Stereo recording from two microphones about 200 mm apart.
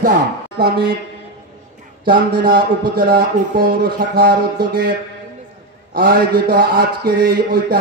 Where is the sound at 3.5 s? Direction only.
45° right (ahead or behind).